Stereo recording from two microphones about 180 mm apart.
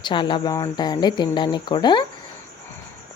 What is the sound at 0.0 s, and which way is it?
Speech, 25° left (ahead or behind).